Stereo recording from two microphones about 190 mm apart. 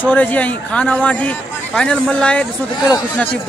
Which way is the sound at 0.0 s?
10° left (ahead or behind).